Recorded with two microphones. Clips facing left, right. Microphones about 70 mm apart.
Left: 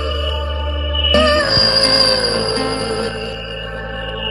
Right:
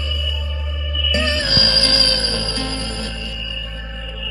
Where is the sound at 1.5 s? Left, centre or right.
Left.